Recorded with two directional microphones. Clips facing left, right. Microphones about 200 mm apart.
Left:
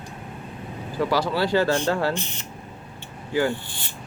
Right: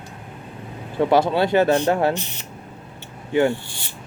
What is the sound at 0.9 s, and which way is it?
Speech, 25° right (ahead or behind).